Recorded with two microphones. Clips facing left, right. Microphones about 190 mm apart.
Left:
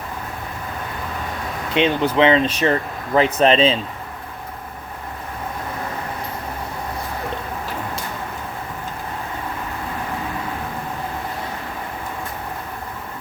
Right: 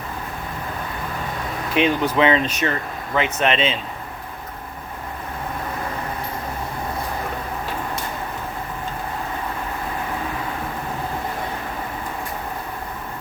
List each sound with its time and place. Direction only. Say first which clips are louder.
1.7 s speech: left 1 dB; 30° left (ahead or behind)